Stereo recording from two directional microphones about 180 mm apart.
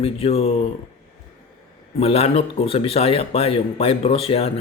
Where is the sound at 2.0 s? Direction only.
35° left (ahead or behind).